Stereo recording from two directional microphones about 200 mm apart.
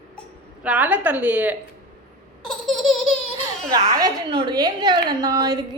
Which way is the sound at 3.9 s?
20° right (ahead or behind).